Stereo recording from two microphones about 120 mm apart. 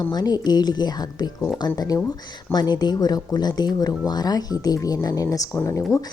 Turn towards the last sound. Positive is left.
turn(degrees=25)  # may be behind; listen again after turning